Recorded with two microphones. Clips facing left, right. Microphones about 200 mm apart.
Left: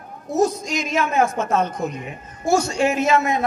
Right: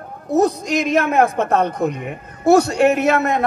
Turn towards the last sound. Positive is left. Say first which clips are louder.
# right 3 dB
turn(degrees=-60)  # may be behind; listen again after turning